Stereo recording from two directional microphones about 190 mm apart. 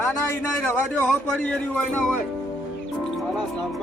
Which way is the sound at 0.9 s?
10° left (ahead or behind).